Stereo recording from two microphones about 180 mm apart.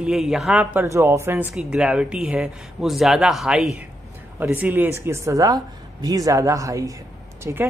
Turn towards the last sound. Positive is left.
turn(degrees=-15)  # may be behind; listen again after turning